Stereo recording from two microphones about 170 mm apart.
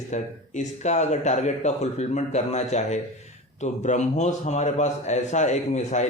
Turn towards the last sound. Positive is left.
turn(degrees=45)  # may be behind; listen again after turning